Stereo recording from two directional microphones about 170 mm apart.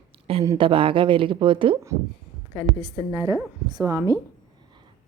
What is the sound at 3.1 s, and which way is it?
A woman's voice, 20° right (ahead or behind).